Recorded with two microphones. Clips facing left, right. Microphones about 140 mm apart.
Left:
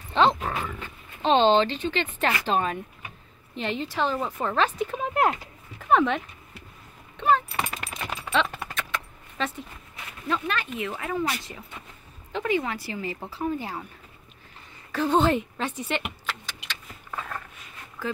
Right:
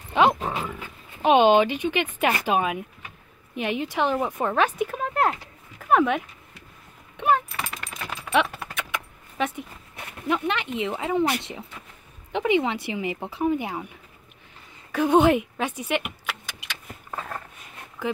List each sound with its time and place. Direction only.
0.1 s dog: 10° right (ahead or behind)
0.5 s speech: 20° right (ahead or behind)
4.9 s a sound: 5° left (ahead or behind)
5.8 s dog: 5° right (ahead or behind)
7.2 s a sound: 15° right (ahead or behind)
7.6 s a sound: 10° left (ahead or behind)
8.7 s keys jangling: 15° right (ahead or behind)
10.2 s speech: 20° right (ahead or behind)
12.3 s speech: 20° right (ahead or behind)
14.9 s speech: 15° right (ahead or behind)
16.3 s keys jangling: 10° right (ahead or behind)
17.1 s a sound: 35° right (ahead or behind)